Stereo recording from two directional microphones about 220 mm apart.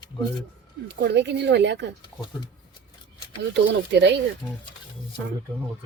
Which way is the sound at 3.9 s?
50° right (ahead or behind).